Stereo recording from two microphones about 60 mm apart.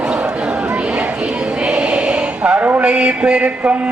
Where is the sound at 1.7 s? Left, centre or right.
Centre.